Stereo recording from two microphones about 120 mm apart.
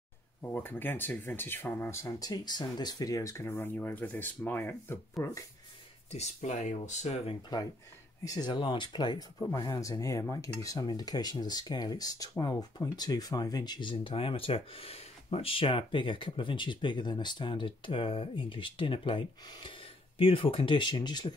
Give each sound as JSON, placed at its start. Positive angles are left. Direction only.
{"t": 0.4, "sound": "speech", "side_deg": 15}
{"t": 6.1, "sound": "speech", "side_deg": 70}
{"t": 8.2, "sound": "cutlery", "side_deg": 30}